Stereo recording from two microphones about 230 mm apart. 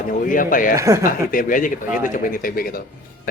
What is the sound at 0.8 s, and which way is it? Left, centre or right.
Speech, centre.